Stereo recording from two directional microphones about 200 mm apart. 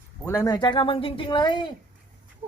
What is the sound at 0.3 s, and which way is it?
Speech, 20° left (ahead or behind).